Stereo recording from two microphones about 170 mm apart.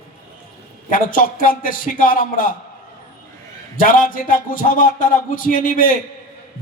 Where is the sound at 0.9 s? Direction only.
50° left (ahead or behind).